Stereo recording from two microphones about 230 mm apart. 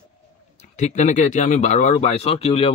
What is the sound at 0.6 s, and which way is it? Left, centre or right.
Speech, left.